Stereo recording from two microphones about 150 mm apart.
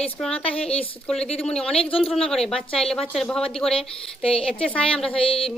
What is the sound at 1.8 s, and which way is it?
Speech, 40° left (ahead or behind).